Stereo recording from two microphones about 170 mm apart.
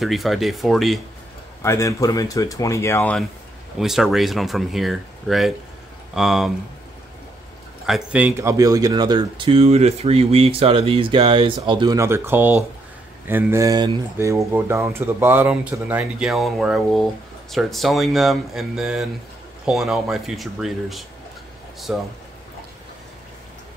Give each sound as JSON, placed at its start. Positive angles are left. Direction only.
{"t": 0.0, "sound": "speech", "side_deg": 0}
{"t": 1.6, "sound": "speech", "side_deg": 15}
{"t": 3.8, "sound": "speech", "side_deg": 0}
{"t": 7.8, "sound": "speech", "side_deg": -5}